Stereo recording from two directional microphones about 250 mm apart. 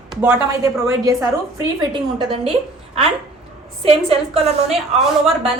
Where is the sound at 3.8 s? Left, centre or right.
Right.